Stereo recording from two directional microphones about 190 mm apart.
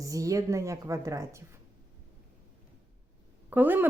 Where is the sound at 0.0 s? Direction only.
15° right (ahead or behind).